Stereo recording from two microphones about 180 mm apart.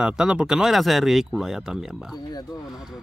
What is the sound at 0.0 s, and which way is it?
Speech, 5° right (ahead or behind).